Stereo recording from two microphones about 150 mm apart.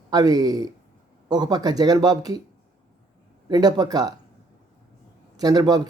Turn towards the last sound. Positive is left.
turn(degrees=-25)  # may be behind; listen again after turning